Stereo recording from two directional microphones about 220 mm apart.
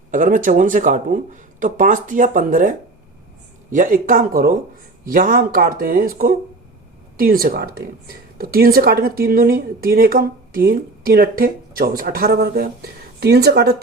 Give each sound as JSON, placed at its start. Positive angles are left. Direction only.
{"t": 0.1, "sound": "speech", "side_deg": -35}